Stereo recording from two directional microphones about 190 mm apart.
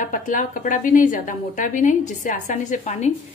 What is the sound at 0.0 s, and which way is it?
A woman's voice, 45° left (ahead or behind).